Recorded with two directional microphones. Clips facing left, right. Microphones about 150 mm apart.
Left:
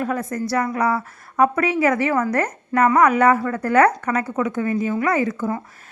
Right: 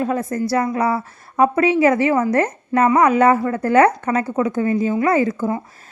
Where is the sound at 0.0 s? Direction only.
25° right (ahead or behind).